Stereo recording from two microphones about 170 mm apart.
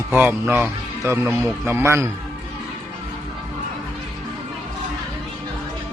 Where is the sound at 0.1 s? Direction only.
10° right (ahead or behind).